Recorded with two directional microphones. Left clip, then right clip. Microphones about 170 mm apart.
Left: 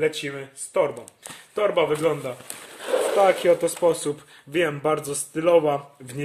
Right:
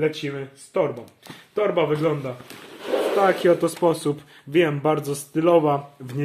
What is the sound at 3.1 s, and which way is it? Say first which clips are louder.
Speech: even; 5° left (ahead or behind).